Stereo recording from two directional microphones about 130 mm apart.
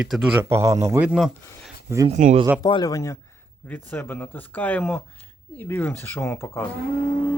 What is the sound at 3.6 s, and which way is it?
Speech, 15° left (ahead or behind).